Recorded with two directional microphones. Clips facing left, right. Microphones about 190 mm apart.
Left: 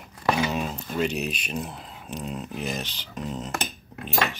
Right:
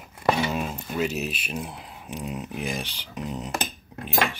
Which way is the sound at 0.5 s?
5° right (ahead or behind).